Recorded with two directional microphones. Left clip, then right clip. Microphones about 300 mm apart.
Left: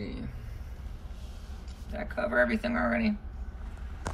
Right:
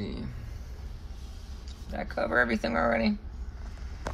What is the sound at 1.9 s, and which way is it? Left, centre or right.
Speech, right.